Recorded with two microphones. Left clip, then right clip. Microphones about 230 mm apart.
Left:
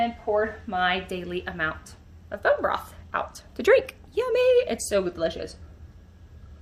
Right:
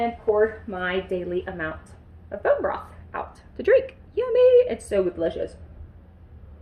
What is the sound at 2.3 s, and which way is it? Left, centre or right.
Speech, left.